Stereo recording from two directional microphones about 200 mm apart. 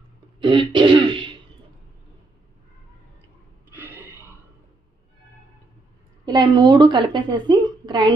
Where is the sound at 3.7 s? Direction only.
10° right (ahead or behind).